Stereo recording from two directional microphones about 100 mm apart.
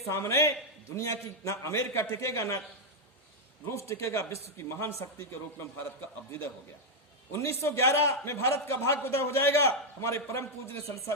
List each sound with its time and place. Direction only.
0.1 s a man's voice: 30° left (ahead or behind)
3.7 s a man's voice: 30° left (ahead or behind)
7.3 s a man's voice: 30° left (ahead or behind)